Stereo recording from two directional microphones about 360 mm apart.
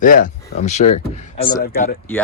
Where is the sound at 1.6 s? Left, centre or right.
Left.